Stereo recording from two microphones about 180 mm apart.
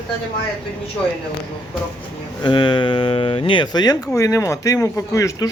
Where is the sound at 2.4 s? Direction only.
25° left (ahead or behind).